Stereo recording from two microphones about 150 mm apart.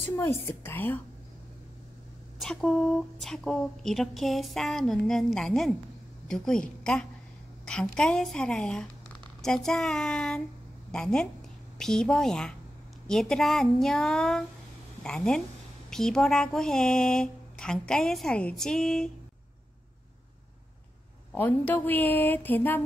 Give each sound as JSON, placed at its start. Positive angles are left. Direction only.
{"t": 0.0, "sound": "a woman's voice", "side_deg": 15}
{"t": 2.3, "sound": "speech", "side_deg": 0}
{"t": 21.3, "sound": "a woman's voice", "side_deg": 10}